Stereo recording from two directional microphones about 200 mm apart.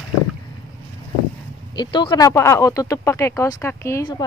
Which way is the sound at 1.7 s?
20° left (ahead or behind).